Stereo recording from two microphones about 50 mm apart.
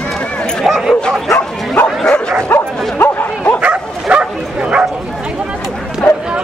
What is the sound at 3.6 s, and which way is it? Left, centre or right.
Bow-wow, right.